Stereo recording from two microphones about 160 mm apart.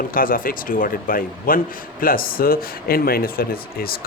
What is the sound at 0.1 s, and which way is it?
A man's voice, 60° left (ahead or behind).